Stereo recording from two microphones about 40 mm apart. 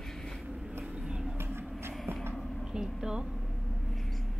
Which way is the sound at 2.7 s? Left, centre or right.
Centre.